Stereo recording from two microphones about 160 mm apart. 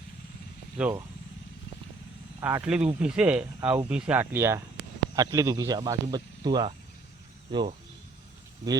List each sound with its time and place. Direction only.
0.8 s speech: 10° right (ahead or behind)
2.4 s speech: 15° right (ahead or behind); by 7.6 s 30° right (ahead or behind)